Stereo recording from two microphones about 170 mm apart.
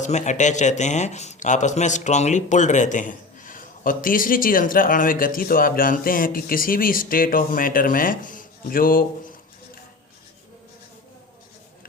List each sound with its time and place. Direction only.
0.0 s speech: 45° left (ahead or behind)